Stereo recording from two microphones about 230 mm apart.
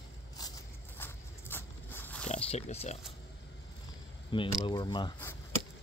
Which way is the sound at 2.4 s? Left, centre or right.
Left.